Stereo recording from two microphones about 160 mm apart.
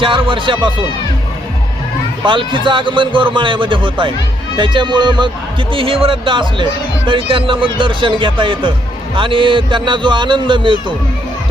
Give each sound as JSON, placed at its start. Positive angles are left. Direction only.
{"t": 0.0, "sound": "speech", "side_deg": -30}
{"t": 2.2, "sound": "a man's voice", "side_deg": -30}